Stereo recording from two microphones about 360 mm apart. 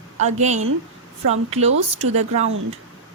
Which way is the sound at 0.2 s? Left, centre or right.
Centre.